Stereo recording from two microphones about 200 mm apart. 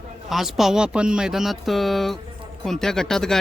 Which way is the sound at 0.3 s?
Centre (ahead or behind).